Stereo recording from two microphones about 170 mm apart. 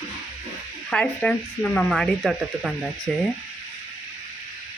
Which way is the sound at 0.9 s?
5° left (ahead or behind).